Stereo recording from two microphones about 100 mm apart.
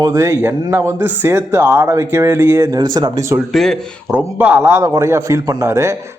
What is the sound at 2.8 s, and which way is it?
Speech, 40° right (ahead or behind).